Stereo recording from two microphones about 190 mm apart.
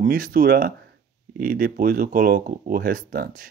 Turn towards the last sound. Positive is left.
turn(degrees=-50)  # may be behind; listen again after turning